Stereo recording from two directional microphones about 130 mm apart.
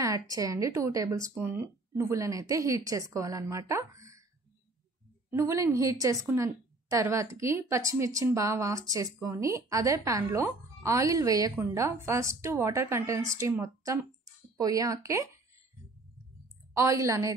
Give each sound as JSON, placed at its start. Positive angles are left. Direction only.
{"t": 0.0, "sound": "a woman's voice", "side_deg": -25}
{"t": 5.3, "sound": "a woman's voice", "side_deg": -25}
{"t": 16.7, "sound": "a woman's voice", "side_deg": -25}